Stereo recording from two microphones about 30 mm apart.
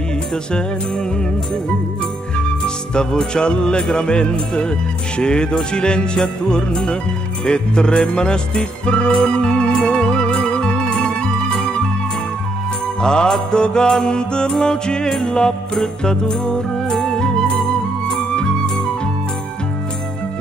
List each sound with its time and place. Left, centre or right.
0.5 s speech: left
2.3 s music: left
3.9 s speech: left
8.8 s music: left
9.3 s speech: left
9.8 s music: left
13.0 s speech: left